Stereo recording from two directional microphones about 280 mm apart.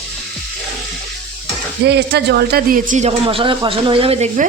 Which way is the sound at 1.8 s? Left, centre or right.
Right.